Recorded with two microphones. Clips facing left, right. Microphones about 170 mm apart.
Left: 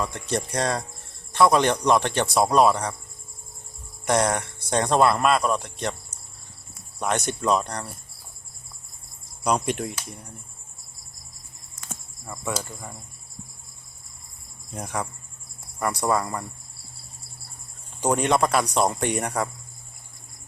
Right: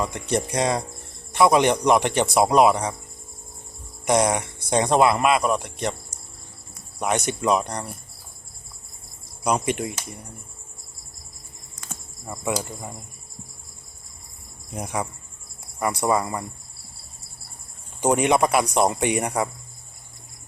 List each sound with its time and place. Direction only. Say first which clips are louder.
0.0 s speech: right 3 dB; 15° right (ahead or behind)
4.0 s speech: right 2 dB; 15° right (ahead or behind)
7.3 s speech: right 1 dB; 15° right (ahead or behind)
9.4 s speech: right 1 dB; centre (ahead or behind)
12.3 s speech: right 4 dB; 15° right (ahead or behind)
14.8 s speech: right 2 dB; 10° right (ahead or behind)
18.0 s speech: right 2 dB; 15° right (ahead or behind)